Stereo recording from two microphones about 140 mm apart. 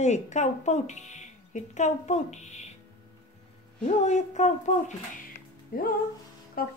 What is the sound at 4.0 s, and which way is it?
Speech, 55° left (ahead or behind).